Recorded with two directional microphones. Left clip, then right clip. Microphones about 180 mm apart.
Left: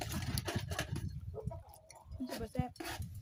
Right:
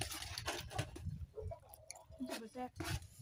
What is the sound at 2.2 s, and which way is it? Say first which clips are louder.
Keys jangling: left 4 dB; 65° left (ahead or behind).